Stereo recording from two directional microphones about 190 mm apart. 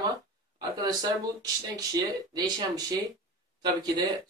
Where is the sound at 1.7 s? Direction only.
20° right (ahead or behind).